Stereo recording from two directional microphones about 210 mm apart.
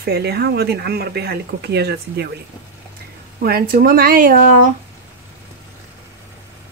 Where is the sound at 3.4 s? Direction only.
45° right (ahead or behind).